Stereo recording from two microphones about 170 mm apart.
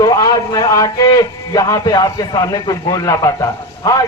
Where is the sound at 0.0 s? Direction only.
20° left (ahead or behind).